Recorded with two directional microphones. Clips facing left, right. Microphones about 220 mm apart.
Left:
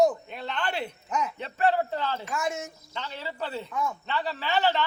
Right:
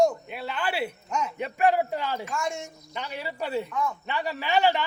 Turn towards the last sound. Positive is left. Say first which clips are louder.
# right 2 dB
turn(degrees=-15)  # may be behind; listen again after turning